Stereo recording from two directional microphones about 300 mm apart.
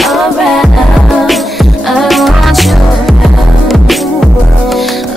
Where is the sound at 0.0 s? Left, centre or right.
Centre.